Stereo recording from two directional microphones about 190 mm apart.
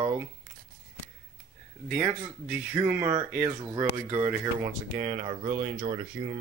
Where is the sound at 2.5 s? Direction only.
10° right (ahead or behind).